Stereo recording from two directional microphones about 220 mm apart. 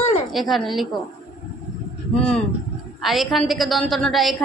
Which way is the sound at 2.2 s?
5° left (ahead or behind).